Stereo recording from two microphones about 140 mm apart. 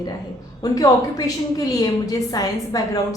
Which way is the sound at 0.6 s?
25° left (ahead or behind).